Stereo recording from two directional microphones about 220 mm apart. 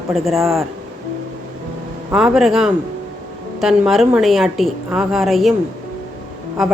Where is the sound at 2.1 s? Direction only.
Centre (ahead or behind).